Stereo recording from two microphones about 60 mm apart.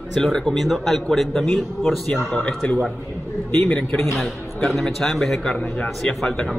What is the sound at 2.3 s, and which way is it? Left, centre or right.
Speech, centre.